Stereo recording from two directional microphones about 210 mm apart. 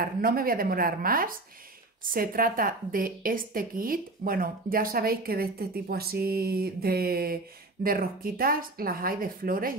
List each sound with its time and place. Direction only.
0.0 s a woman's voice: 45° right (ahead or behind)